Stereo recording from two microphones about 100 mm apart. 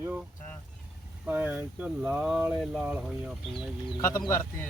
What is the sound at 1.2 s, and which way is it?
Speech, 15° right (ahead or behind).